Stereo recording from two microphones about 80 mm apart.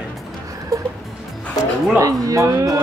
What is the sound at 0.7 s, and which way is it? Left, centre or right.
Music, right.